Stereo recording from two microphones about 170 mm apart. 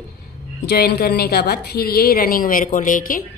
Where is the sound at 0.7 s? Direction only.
70° left (ahead or behind).